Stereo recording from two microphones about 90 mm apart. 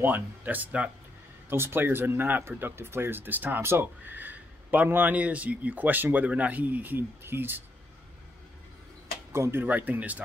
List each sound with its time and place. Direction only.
0.0 s speech: 20° right (ahead or behind)
1.5 s speech: 25° right (ahead or behind)
9.3 s speech: 30° right (ahead or behind)